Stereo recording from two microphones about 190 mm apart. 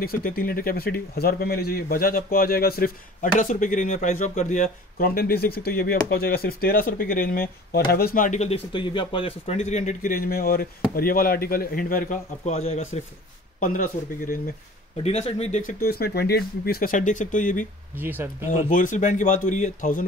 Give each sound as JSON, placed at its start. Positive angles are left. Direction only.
{"t": 0.0, "sound": "speech", "side_deg": 50}
{"t": 13.6, "sound": "speech", "side_deg": 50}
{"t": 15.0, "sound": "speech", "side_deg": 35}
{"t": 15.8, "sound": "speech", "side_deg": 55}
{"t": 17.9, "sound": "speech", "side_deg": -10}
{"t": 18.5, "sound": "speech", "side_deg": 45}